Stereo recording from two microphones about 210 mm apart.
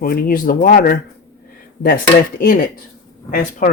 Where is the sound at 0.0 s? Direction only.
45° left (ahead or behind).